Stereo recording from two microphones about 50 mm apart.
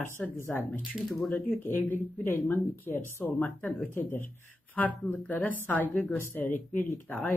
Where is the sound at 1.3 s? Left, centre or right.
Left.